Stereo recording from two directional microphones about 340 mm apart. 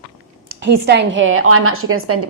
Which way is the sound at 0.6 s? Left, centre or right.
Right.